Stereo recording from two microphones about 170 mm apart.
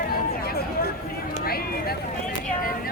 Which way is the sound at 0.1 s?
60° left (ahead or behind).